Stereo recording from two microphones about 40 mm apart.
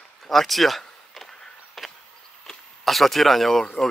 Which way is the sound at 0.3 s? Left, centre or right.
Centre.